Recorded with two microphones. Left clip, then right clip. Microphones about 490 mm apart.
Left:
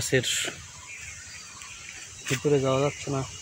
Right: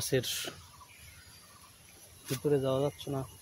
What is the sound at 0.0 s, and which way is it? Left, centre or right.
Speech, right.